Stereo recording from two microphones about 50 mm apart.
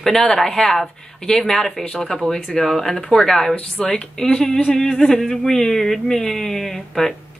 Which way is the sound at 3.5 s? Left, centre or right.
Left.